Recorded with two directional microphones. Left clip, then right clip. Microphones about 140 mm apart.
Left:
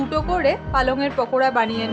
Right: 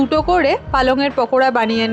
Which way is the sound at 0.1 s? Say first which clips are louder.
Right 3 dB; 55° right (ahead or behind).